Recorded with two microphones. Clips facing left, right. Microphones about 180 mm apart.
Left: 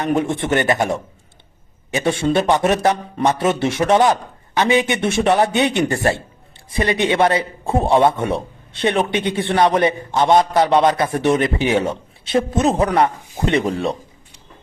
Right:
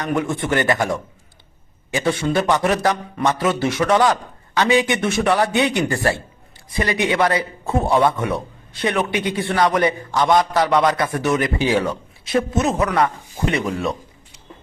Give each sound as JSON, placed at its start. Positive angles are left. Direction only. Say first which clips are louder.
{"t": 0.0, "sound": "a man's voice", "louder": "left 3 dB", "side_deg": 25}